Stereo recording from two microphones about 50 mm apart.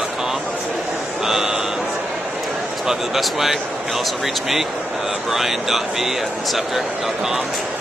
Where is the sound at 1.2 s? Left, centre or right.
Centre.